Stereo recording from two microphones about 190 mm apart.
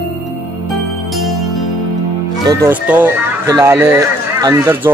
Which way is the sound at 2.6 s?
10° right (ahead or behind).